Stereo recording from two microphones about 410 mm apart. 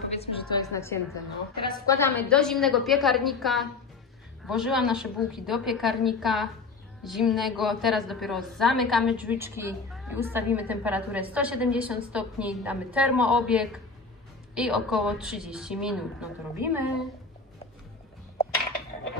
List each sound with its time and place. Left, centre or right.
0.1 s a woman's voice: centre